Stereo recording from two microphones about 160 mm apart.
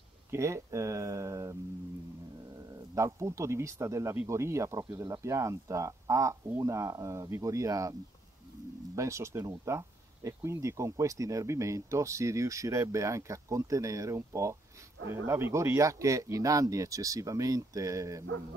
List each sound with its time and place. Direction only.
0.3 s speech: 20° right (ahead or behind)
2.9 s speech: 20° right (ahead or behind)
8.9 s speech: 20° right (ahead or behind)